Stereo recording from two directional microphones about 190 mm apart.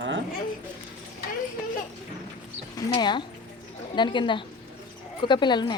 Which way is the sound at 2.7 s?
25° left (ahead or behind).